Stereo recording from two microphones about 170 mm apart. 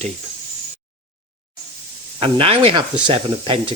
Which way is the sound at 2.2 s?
35° right (ahead or behind).